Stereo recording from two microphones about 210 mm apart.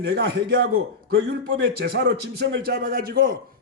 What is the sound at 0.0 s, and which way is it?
Speech, 55° right (ahead or behind).